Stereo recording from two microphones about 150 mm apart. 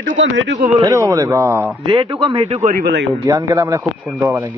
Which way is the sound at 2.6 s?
80° right.